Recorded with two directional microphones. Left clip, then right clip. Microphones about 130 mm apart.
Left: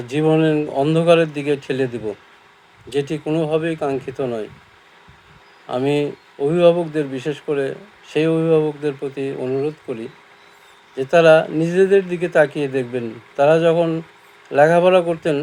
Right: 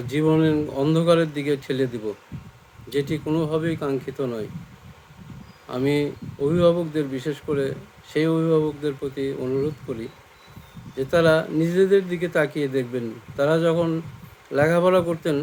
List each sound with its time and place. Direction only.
0.1 s speech: 20° right (ahead or behind)
2.9 s speech: 20° right (ahead or behind)
5.6 s speech: 20° right (ahead or behind)
10.9 s speech: 20° right (ahead or behind)